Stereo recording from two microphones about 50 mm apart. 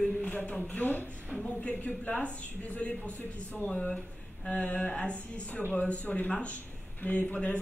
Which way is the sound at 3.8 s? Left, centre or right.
Centre.